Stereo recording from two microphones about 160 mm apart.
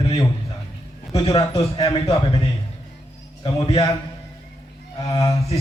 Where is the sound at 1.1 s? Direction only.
35° left (ahead or behind).